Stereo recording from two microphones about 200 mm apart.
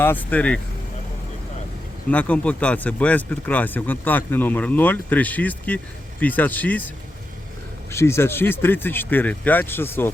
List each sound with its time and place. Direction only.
0.0 s speech: 10° left (ahead or behind)
2.0 s speech: 5° left (ahead or behind)